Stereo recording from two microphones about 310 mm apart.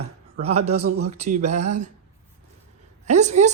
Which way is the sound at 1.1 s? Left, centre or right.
Right.